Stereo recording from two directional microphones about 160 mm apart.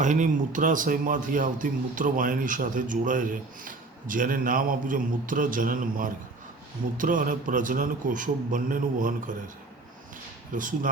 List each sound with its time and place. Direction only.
0.0 s speech: 50° right (ahead or behind)
10.5 s speech: 55° right (ahead or behind)